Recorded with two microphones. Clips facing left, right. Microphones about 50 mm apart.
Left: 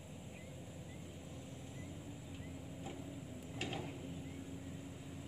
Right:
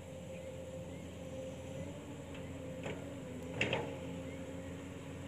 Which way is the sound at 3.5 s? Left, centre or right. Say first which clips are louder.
Right 7 dB; right.